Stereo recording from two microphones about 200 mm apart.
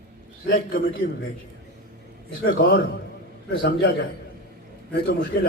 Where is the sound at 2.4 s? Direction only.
50° left (ahead or behind).